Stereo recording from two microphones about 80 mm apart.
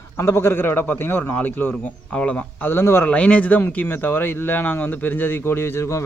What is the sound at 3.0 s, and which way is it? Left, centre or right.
Speech, centre.